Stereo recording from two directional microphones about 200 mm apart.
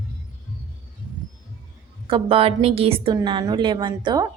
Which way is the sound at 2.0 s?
25° right (ahead or behind).